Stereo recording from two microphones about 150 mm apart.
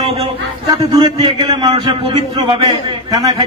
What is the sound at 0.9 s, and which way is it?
A man's voice, 30° right (ahead or behind).